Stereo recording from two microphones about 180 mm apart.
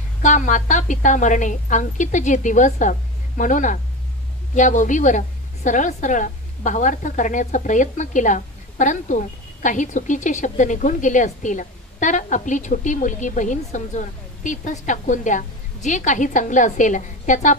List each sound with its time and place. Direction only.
0.2 s a woman's voice: 40° left (ahead or behind)